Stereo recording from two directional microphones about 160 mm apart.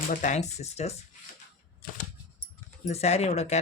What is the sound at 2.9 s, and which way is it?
Speech, 40° left (ahead or behind).